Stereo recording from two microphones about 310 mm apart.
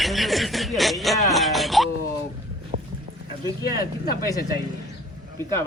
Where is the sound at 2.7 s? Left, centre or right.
Right.